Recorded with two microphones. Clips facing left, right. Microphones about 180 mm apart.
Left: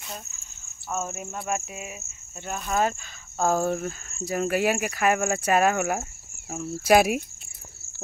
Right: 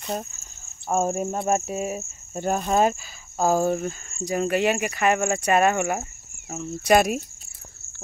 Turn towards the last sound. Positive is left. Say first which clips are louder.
# even
turn(degrees=5)  # may be behind; listen again after turning